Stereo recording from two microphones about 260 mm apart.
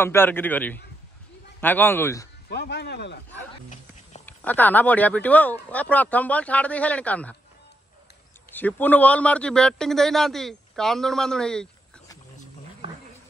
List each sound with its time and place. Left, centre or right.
0.0 s a man's voice: centre
2.5 s speech: left
4.3 s a man's voice: centre
8.5 s a man's voice: centre